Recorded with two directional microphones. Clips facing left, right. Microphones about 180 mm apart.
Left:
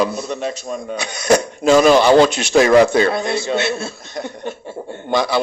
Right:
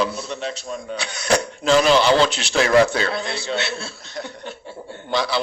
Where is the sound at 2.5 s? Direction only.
15° left (ahead or behind).